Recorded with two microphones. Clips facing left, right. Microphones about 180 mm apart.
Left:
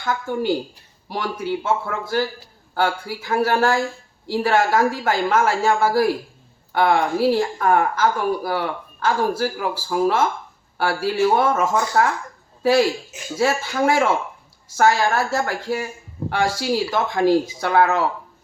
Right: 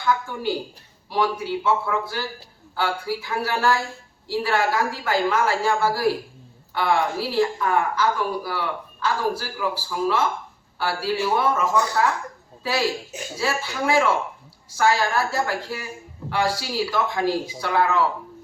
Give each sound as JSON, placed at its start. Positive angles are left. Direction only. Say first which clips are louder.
{"t": 0.0, "sound": "a woman's voice", "louder": "left 1 dB", "side_deg": 45}
{"t": 13.4, "sound": "a woman's voice", "louder": "left 6 dB", "side_deg": 50}